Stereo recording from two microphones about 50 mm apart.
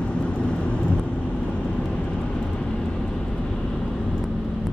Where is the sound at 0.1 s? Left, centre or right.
Left.